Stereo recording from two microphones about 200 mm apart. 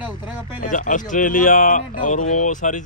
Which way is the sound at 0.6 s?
40° left (ahead or behind).